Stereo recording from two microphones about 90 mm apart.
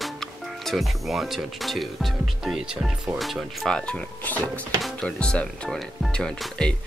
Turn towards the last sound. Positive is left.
turn(degrees=5)  # may be behind; listen again after turning